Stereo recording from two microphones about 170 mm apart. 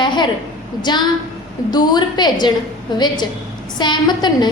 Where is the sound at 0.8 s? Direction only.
25° left (ahead or behind).